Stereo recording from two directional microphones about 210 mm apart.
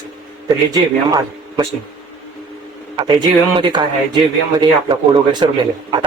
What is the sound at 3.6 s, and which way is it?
Speech, 20° right (ahead or behind).